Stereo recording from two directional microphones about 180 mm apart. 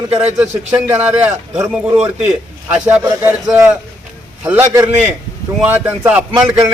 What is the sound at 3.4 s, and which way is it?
A man's voice, 5° right (ahead or behind).